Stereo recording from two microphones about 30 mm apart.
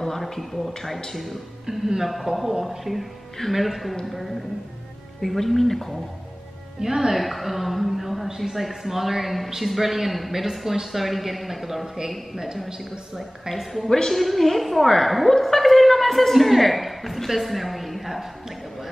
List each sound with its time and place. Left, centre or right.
0.0 s a woman's voice: centre
1.7 s a woman's voice: centre
2.0 s a woman's voice: centre
6.8 s a woman's voice: centre
7.2 s a woman's voice: centre
12.6 s speech: right
13.1 s a woman's voice: centre
13.8 s a woman's voice: centre
14.1 s a woman's voice: centre